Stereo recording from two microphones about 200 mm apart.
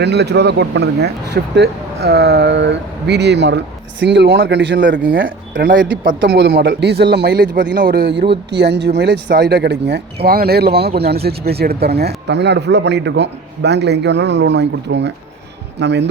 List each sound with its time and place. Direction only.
0.0 s speech: 55° right (ahead or behind)
5.1 s speech: 45° right (ahead or behind)